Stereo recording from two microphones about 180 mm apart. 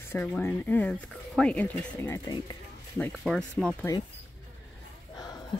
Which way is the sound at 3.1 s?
Centre (ahead or behind).